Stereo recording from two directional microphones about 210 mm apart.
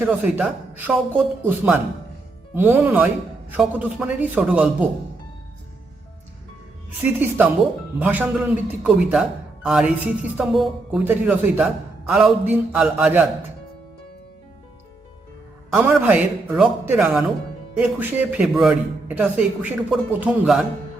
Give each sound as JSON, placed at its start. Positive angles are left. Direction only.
{"t": 0.0, "sound": "speech", "side_deg": -5}
{"t": 7.0, "sound": "speech", "side_deg": -10}
{"t": 15.7, "sound": "speech", "side_deg": -10}